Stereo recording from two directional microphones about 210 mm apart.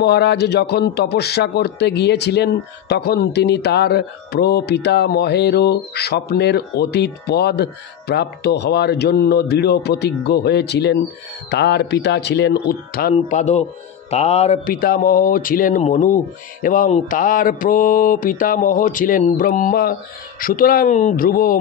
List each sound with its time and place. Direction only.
0.0 s speech: 50° left (ahead or behind)
13.1 s mantra: 35° left (ahead or behind)
14.7 s mantra: 45° left (ahead or behind)